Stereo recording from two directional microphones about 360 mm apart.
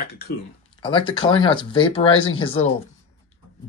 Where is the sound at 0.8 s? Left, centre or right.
Centre.